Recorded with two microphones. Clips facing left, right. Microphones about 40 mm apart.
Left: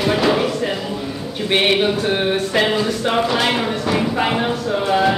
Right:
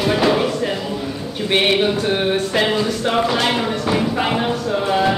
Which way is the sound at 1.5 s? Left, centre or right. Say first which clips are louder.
Even; centre.